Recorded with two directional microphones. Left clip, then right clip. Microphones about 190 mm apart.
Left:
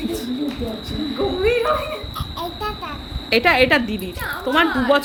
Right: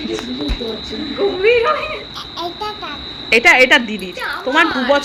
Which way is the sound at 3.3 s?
5° left (ahead or behind).